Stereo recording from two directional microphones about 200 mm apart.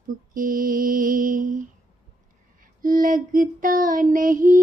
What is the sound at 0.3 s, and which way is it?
Mantra, 45° right (ahead or behind).